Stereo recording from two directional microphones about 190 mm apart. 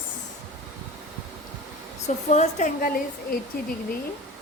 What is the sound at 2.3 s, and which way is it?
A woman's voice, 40° left (ahead or behind).